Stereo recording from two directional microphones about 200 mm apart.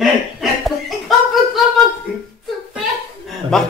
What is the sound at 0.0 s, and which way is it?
Chuckle, centre (ahead or behind).